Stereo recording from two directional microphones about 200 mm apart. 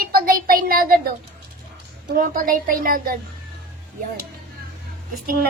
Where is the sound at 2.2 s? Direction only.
45° right (ahead or behind).